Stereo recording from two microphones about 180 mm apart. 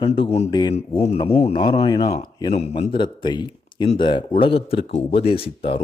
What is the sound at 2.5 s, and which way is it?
Speech, 35° left (ahead or behind).